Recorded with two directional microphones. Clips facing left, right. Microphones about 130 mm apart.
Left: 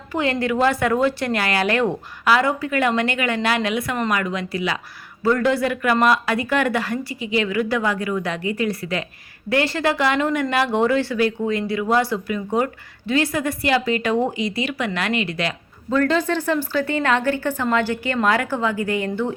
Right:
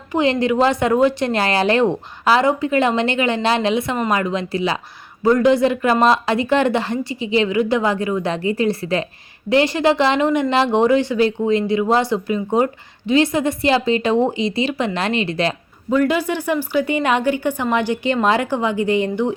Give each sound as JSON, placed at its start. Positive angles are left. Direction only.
{"t": 0.1, "sound": "speech", "side_deg": -20}
{"t": 5.2, "sound": "speech", "side_deg": -20}
{"t": 15.9, "sound": "speech", "side_deg": -10}